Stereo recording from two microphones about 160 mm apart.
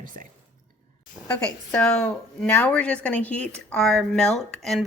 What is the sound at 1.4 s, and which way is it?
A woman's voice, 5° left (ahead or behind).